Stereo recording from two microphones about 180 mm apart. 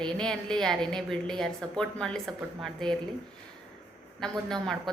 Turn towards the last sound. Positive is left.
turn(degrees=5)  # may be behind; listen again after turning